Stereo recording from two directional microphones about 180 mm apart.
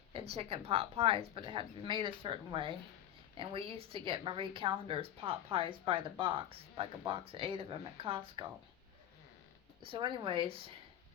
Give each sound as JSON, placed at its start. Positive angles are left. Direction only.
{"t": 0.3, "sound": "a woman's voice", "side_deg": -35}
{"t": 9.8, "sound": "a woman's voice", "side_deg": -30}